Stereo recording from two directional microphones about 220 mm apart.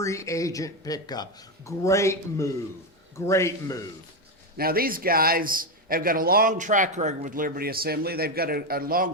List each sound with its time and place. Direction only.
0.0 s speech: 15° left (ahead or behind)
4.5 s a man's voice: 40° right (ahead or behind)